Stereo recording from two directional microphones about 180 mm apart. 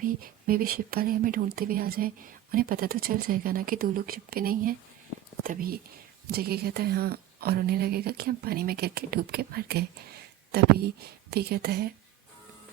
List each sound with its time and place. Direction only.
0.0 s a woman's voice: 55° right (ahead or behind)